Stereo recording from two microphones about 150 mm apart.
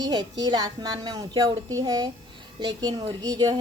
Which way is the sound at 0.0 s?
25° right (ahead or behind).